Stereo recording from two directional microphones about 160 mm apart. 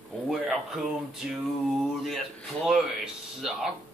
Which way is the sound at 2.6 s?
5° right (ahead or behind).